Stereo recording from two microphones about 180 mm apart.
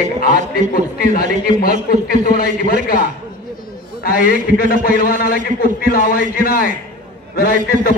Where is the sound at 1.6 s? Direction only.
55° left (ahead or behind).